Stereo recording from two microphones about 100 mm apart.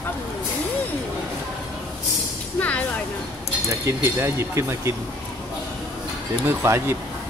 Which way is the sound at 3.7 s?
30° right (ahead or behind).